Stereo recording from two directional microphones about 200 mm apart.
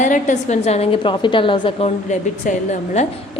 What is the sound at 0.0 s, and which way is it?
A woman's voice, 40° left (ahead or behind).